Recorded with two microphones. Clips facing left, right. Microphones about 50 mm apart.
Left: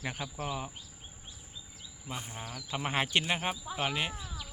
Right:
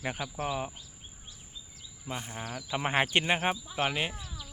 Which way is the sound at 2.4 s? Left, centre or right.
Right.